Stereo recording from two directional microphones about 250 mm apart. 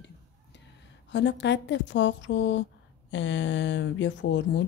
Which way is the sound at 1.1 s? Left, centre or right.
Left.